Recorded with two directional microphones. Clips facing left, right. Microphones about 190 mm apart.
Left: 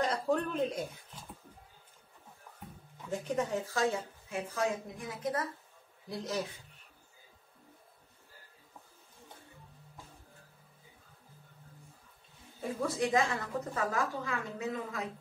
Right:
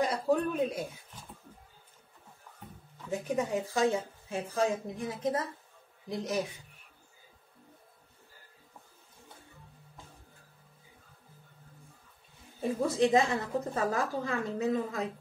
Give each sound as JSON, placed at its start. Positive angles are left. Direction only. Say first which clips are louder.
{"t": 0.0, "sound": "a sound", "louder": "right 3 dB", "side_deg": -5}
{"t": 3.1, "sound": "a woman's voice", "louder": "right 2 dB", "side_deg": -10}
{"t": 12.6, "sound": "a woman's voice", "louder": "right 5 dB", "side_deg": -25}